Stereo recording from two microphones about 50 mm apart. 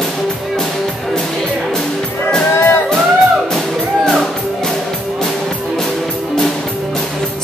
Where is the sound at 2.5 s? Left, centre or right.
Left.